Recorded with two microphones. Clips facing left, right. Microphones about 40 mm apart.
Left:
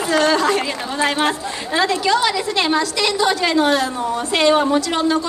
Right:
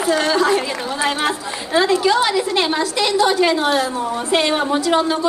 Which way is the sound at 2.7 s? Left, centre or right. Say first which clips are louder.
Right 1 dB; right.